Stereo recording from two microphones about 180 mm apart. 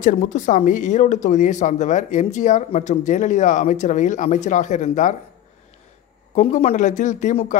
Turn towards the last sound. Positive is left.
turn(degrees=45)  # may be behind; listen again after turning